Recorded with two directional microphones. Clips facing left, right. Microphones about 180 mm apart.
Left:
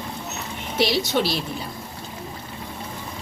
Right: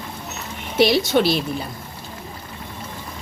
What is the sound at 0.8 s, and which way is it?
Speech, 55° right (ahead or behind).